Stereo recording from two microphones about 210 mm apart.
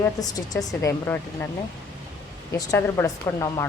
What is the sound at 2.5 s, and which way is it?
Speech, 15° left (ahead or behind).